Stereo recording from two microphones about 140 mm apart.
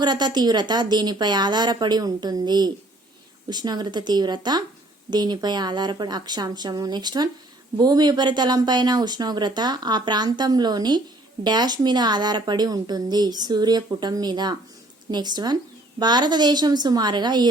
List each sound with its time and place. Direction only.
0.0 s a woman's voice: 30° right (ahead or behind)